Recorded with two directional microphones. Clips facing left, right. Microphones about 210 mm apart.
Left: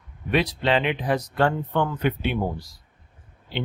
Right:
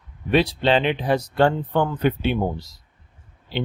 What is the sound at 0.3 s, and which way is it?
Speech, 30° right (ahead or behind).